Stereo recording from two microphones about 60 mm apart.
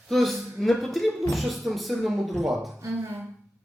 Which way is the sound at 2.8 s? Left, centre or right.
Right.